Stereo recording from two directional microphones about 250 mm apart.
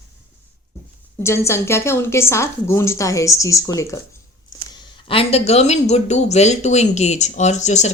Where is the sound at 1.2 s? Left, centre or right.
Centre.